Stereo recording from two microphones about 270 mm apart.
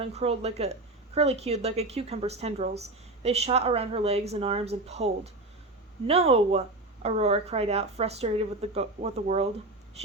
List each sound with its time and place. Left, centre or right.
0.0 s speech: right